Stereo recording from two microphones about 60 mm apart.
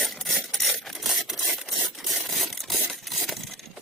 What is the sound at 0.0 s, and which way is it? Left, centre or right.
Filing, centre.